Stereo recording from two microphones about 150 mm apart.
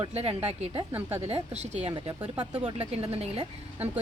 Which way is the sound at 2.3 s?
25° right (ahead or behind).